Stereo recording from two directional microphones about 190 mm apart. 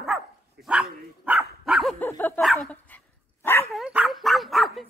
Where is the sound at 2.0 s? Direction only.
10° left (ahead or behind).